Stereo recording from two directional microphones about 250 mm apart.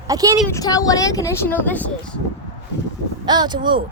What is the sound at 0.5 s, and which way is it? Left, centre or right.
Speech, centre.